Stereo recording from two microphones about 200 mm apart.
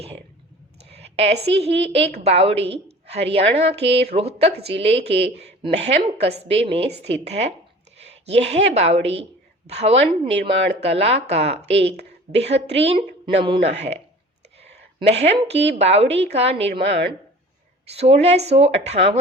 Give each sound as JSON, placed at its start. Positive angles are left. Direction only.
{"t": 0.9, "sound": "a sound", "side_deg": -30}
{"t": 2.2, "sound": "a woman's voice", "side_deg": -30}
{"t": 15.2, "sound": "speech", "side_deg": -30}